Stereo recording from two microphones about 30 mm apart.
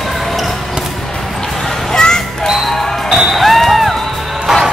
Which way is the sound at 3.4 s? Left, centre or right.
Centre.